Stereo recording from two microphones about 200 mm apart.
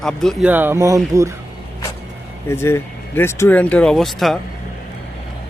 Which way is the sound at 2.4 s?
10° left (ahead or behind).